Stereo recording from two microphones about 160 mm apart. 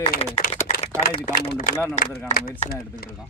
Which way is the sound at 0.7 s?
40° left (ahead or behind).